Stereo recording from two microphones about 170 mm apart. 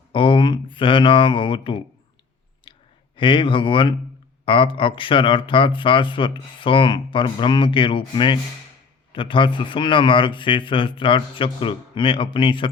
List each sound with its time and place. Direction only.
0.1 s speech: 30° left (ahead or behind)
3.2 s speech: 30° left (ahead or behind)